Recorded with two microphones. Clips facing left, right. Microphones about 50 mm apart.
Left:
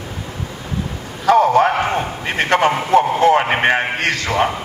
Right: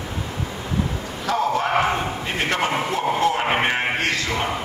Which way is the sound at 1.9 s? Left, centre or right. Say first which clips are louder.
Left 4 dB; left.